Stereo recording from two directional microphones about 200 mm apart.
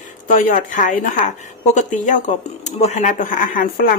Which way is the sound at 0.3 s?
40° left (ahead or behind).